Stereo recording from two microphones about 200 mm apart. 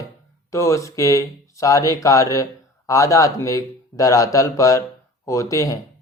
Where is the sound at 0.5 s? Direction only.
15° left (ahead or behind).